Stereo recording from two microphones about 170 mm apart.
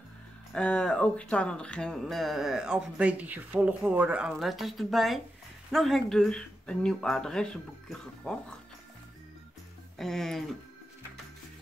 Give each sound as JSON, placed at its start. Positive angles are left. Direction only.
{"t": 0.5, "sound": "speech", "side_deg": 5}
{"t": 9.9, "sound": "speech", "side_deg": 0}